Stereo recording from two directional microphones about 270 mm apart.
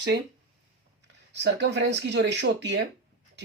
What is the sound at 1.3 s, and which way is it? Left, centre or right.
Speech, right.